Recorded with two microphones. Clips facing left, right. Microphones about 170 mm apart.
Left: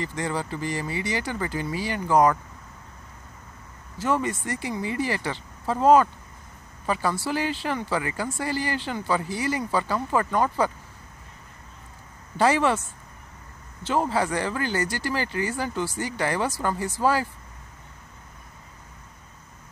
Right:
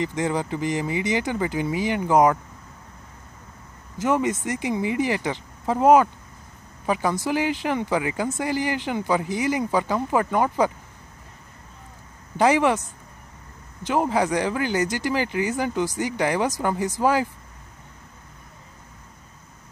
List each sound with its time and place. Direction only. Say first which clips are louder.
0.0 s speech: right 4 dB; 15° right (ahead or behind)
4.0 s speech: right 3 dB; 20° right (ahead or behind)
12.4 s speech: right 2 dB; 15° right (ahead or behind)
13.8 s speech: right 2 dB; 15° right (ahead or behind)